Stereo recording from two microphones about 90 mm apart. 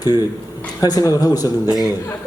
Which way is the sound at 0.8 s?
45° left (ahead or behind).